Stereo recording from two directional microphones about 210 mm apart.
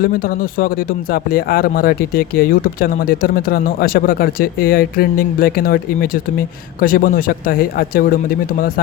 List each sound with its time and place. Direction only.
1.1 s speech: 45° left (ahead or behind)